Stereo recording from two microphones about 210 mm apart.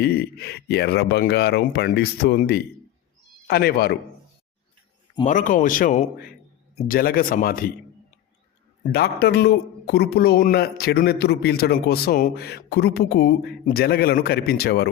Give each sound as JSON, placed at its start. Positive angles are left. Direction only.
{"t": 0.0, "sound": "a man's voice", "side_deg": 50}
{"t": 5.2, "sound": "a man's voice", "side_deg": 40}
{"t": 8.8, "sound": "a man's voice", "side_deg": 50}